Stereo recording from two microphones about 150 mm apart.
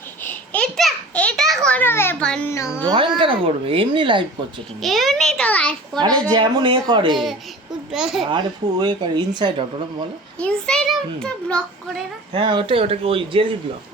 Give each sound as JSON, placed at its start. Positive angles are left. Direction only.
{"t": 0.2, "sound": "a sound", "side_deg": 10}
{"t": 2.2, "sound": "a child's voice", "side_deg": 5}
{"t": 2.5, "sound": "a child's voice", "side_deg": 20}
{"t": 2.8, "sound": "speech", "side_deg": -30}
{"t": 4.8, "sound": "a child's voice", "side_deg": 0}
{"t": 6.3, "sound": "speech", "side_deg": -30}
{"t": 7.9, "sound": "a child's voice", "side_deg": -5}
{"t": 8.8, "sound": "speech", "side_deg": -30}
{"t": 10.3, "sound": "a child's voice", "side_deg": 5}
{"t": 12.3, "sound": "speech", "side_deg": -35}